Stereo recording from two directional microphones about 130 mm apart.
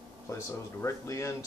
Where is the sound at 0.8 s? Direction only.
25° left (ahead or behind).